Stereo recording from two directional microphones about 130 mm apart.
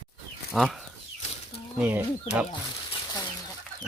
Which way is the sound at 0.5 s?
Centre (ahead or behind).